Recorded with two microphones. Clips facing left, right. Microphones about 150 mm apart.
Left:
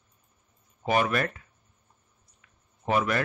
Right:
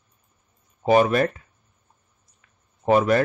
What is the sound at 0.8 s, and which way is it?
Speech, 30° right (ahead or behind).